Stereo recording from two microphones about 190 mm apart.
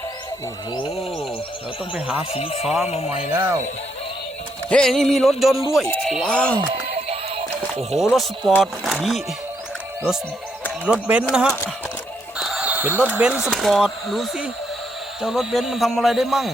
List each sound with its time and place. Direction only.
2.3 s speech: 30° left (ahead or behind)
3.3 s speech: 10° right (ahead or behind)
4.7 s speech: centre (ahead or behind)
6.6 s music: 30° right (ahead or behind)
7.9 s speech: centre (ahead or behind)
11.1 s speech: 5° right (ahead or behind)
12.4 s music: centre (ahead or behind)
13.1 s speech: 5° right (ahead or behind)